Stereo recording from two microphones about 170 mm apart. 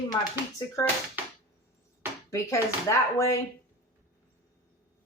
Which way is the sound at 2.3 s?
15° left (ahead or behind).